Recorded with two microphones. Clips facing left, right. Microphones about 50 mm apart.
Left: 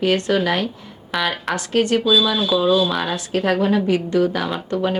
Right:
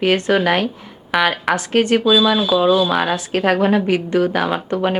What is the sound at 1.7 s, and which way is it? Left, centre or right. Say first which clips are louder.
Speech: right 2 dB; right.